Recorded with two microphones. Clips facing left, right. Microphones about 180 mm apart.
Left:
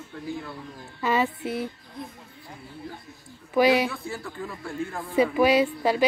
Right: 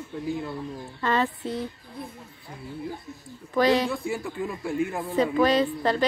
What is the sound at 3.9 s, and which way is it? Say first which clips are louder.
A man's voice: right 5 dB; 15° right (ahead or behind).